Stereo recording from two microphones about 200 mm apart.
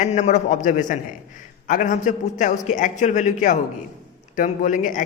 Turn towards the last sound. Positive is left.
turn(degrees=40)  # may be behind; listen again after turning